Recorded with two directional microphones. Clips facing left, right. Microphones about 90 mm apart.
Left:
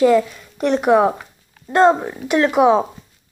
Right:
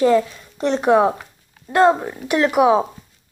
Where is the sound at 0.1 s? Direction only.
5° left (ahead or behind).